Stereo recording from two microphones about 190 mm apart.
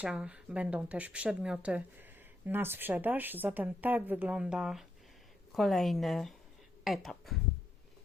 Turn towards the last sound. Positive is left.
turn(degrees=0)  # may be behind; listen again after turning